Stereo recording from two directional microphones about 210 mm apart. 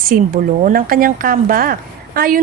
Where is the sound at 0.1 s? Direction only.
40° right (ahead or behind).